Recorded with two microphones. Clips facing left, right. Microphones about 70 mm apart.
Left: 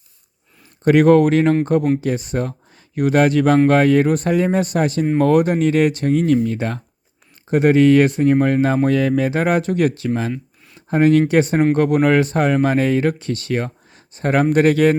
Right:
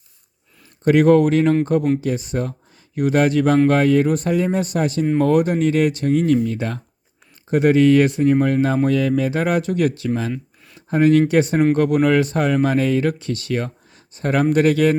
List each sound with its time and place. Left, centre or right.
0.9 s speech: left